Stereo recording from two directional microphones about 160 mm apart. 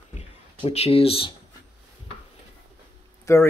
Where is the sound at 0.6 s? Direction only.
40° left (ahead or behind).